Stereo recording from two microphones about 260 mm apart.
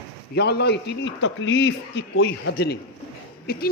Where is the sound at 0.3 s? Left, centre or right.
Left.